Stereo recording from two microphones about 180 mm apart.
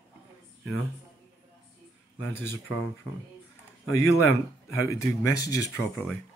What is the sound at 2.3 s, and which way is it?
Speech, 15° left (ahead or behind).